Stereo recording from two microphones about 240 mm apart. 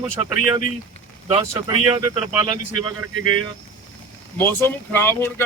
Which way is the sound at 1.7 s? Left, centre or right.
Right.